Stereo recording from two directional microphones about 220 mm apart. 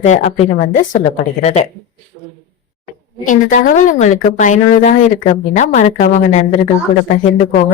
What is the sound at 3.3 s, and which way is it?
A woman's voice, 35° left (ahead or behind).